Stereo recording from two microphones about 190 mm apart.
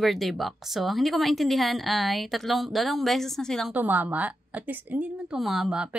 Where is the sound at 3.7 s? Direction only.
10° right (ahead or behind).